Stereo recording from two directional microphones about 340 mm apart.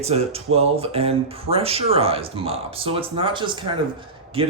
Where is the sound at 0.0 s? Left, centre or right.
Centre.